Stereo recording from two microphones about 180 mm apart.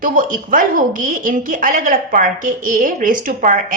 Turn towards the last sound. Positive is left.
turn(degrees=-50)  # may be behind; listen again after turning